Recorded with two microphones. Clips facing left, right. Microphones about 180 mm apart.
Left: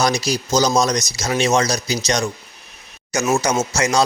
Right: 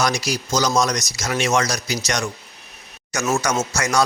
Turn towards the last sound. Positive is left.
turn(degrees=20)  # may be behind; listen again after turning